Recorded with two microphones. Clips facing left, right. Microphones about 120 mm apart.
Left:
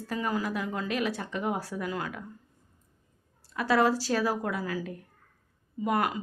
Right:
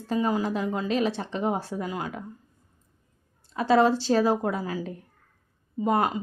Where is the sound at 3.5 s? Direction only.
25° right (ahead or behind).